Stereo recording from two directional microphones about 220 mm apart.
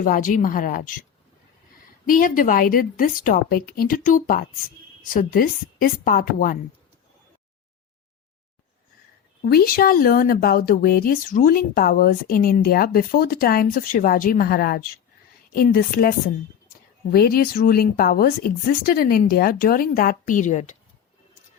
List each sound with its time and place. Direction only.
0.0 s speech: 40° left (ahead or behind)
2.0 s speech: 40° left (ahead or behind)
9.4 s a woman's voice: 45° left (ahead or behind)